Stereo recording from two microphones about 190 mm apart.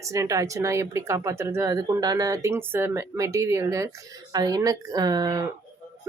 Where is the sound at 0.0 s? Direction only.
15° right (ahead or behind).